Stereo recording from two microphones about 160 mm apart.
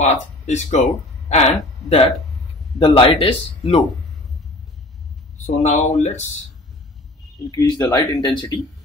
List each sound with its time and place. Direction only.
0.0 s speech: 50° left (ahead or behind)
5.5 s speech: 50° left (ahead or behind)
7.5 s speech: 20° left (ahead or behind)